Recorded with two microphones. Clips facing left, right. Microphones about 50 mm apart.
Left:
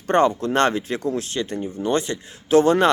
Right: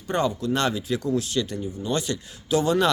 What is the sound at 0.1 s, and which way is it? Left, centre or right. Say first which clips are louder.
Speech: left 6 dB; left.